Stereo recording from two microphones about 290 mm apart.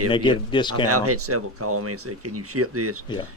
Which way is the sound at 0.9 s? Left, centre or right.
Right.